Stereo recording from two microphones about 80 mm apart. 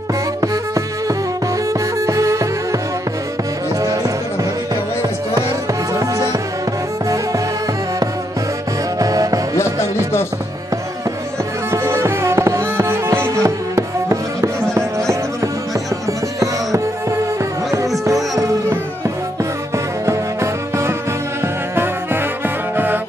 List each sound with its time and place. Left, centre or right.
0.4 s music: right
3.8 s music: right
5.9 s music: right
9.0 s music: right
11.7 s music: right
20.1 s music: right